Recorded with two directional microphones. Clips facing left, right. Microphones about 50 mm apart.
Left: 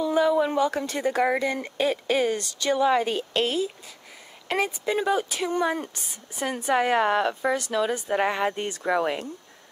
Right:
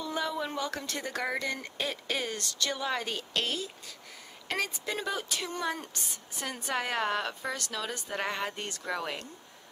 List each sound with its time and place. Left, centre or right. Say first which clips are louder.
0.0 s speech: left 11 dB; centre